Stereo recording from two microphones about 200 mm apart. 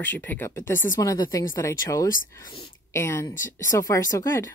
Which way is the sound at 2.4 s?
25° left (ahead or behind).